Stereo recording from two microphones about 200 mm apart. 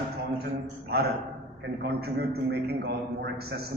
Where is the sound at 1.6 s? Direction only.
55° right (ahead or behind).